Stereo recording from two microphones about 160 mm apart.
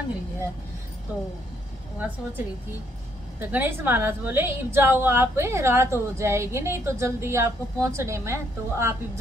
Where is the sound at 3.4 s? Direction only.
10° right (ahead or behind).